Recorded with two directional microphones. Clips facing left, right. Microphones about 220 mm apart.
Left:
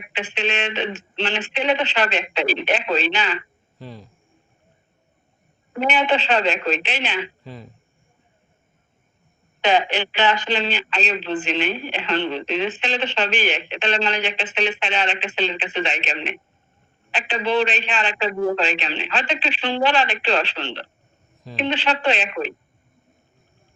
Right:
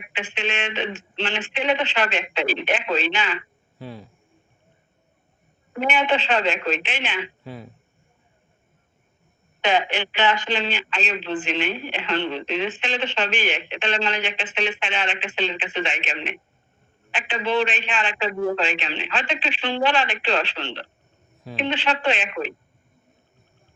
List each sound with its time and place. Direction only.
0.0 s speech: 40° left (ahead or behind)
3.8 s a man's voice: 5° right (ahead or behind)
5.8 s speech: 35° left (ahead or behind)
7.4 s speech: 5° right (ahead or behind)
9.6 s speech: 35° left (ahead or behind)